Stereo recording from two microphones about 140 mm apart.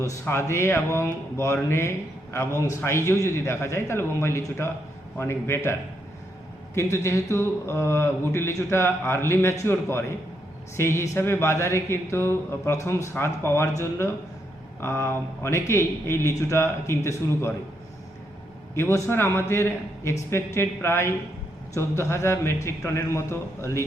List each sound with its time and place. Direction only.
0.0 s a man's voice: 20° left (ahead or behind)
6.7 s speech: 20° left (ahead or behind)
18.7 s speech: 20° left (ahead or behind)